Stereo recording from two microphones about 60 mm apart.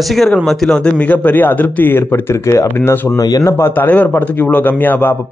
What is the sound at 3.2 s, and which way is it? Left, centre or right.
Speech, left.